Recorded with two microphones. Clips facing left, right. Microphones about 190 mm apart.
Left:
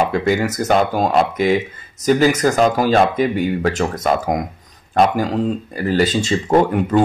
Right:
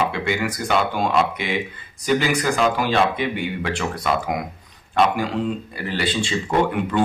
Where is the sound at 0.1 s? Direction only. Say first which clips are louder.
Left 6 dB; 40° left (ahead or behind).